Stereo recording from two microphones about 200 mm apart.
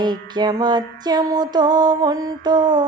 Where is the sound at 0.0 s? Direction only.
20° right (ahead or behind).